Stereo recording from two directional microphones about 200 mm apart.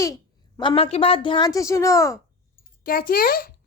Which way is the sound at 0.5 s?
20° left (ahead or behind).